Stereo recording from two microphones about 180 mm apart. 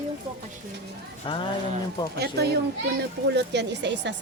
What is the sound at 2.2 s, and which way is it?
A woman's voice, 65° right (ahead or behind).